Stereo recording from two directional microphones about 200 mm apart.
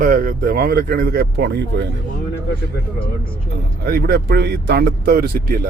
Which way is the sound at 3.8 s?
50° right (ahead or behind).